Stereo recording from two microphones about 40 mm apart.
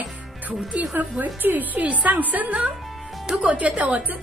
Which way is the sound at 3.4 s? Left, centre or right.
Right.